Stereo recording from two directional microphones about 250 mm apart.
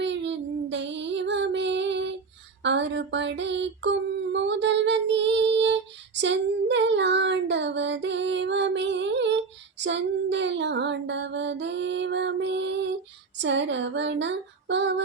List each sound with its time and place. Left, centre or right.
0.0 s child singing: right
2.6 s a sound: right
6.1 s child singing: right
9.8 s female singing: right